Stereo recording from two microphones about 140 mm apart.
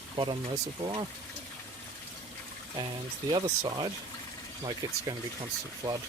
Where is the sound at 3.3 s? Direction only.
30° right (ahead or behind).